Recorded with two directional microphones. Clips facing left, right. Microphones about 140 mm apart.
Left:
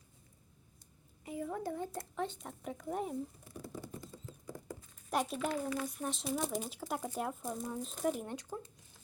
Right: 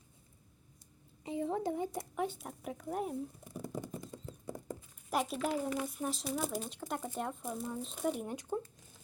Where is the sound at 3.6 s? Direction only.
20° right (ahead or behind).